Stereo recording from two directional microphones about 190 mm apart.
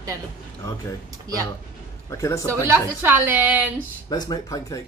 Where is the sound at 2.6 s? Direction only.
10° right (ahead or behind).